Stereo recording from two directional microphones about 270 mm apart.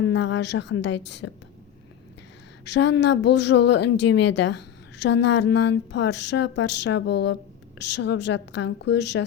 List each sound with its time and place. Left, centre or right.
0.0 s a woman's voice: left
2.6 s a woman's voice: left